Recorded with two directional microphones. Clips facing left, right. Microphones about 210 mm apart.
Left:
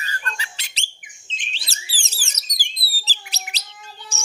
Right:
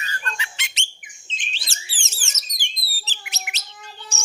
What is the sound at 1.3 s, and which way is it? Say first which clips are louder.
Bird: right 1 dB; 40° right (ahead or behind).